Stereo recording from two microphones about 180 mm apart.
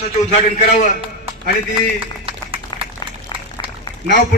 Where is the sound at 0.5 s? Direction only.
40° left (ahead or behind).